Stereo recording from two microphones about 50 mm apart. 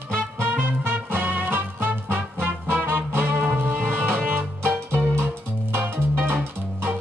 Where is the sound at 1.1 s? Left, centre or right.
Right.